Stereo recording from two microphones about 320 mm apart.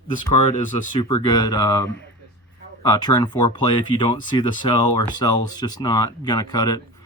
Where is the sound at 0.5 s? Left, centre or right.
Centre.